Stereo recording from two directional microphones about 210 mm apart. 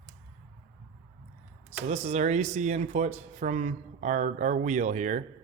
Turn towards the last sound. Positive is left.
turn(degrees=-35)  # may be behind; listen again after turning